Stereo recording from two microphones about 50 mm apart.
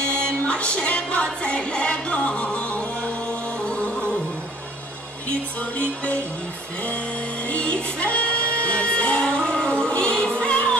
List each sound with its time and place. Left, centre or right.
0.0 s music: left
7.4 s music: left